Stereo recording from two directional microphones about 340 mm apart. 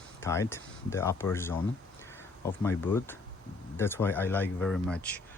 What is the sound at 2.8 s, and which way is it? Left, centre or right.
Speech, centre.